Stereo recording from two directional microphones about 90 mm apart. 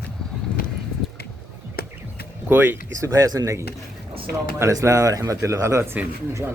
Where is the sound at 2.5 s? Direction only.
25° right (ahead or behind).